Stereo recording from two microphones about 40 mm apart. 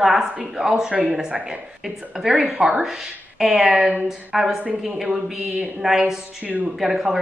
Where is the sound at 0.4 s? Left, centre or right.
Centre.